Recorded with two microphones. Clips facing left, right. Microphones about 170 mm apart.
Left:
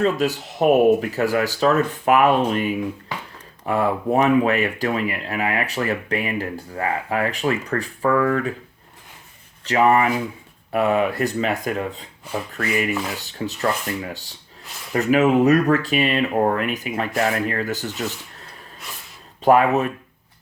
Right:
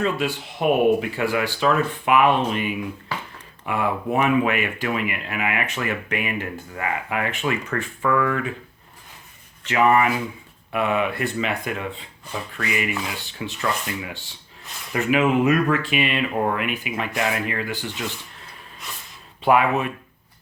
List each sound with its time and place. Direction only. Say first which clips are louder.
0.0 s speech: left 4 dB; 40° left (ahead or behind)
3.1 s a sound: right 1 dB; 20° left (ahead or behind)
3.7 s speech: left 4 dB; 40° left (ahead or behind)
9.6 s speech: left 1 dB; 35° left (ahead or behind)